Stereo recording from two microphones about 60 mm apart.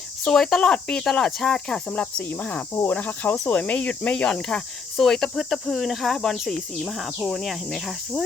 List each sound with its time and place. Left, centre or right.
0.3 s cricket: centre
2.0 s cricket: left; by 7.1 s centre
7.2 s speech: centre